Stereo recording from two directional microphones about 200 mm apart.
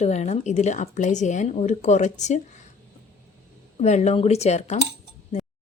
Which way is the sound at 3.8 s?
35° left (ahead or behind).